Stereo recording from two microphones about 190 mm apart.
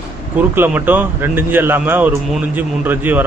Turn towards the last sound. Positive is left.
turn(degrees=-10)  # may be behind; listen again after turning